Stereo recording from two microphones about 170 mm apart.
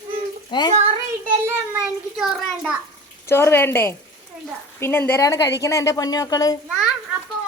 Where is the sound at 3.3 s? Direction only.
15° left (ahead or behind).